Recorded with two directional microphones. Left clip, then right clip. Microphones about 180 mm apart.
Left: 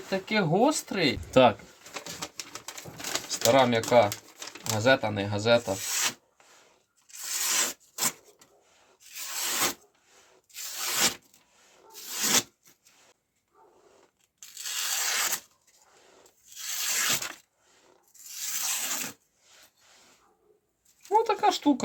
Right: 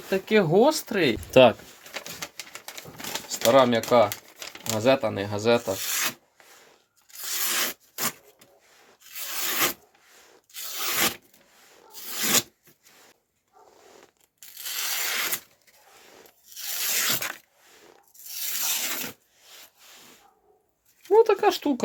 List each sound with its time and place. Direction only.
0.1 s speech: 45° right (ahead or behind)
3.5 s speech: 30° right (ahead or behind)
4.4 s crumpling: 10° right (ahead or behind)
4.8 s speech: 30° right (ahead or behind)
5.7 s rub: centre (ahead or behind)
9.5 s rub: centre (ahead or behind)
10.8 s tearing: 5° right (ahead or behind)
12.2 s a sound: 5° right (ahead or behind)
14.6 s tearing: 5° right (ahead or behind)
16.6 s tearing: 10° right (ahead or behind)
18.3 s rub: 5° right (ahead or behind)
21.1 s a sound: 40° right (ahead or behind)